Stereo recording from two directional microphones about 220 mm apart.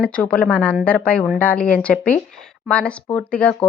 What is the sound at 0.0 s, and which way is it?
Speech, 5° left (ahead or behind).